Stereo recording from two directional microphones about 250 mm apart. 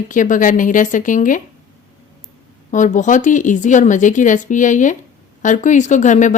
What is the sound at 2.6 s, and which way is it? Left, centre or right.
Speech, left.